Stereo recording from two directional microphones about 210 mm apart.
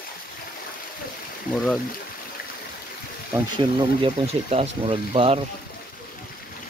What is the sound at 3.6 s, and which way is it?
Speech, 25° right (ahead or behind).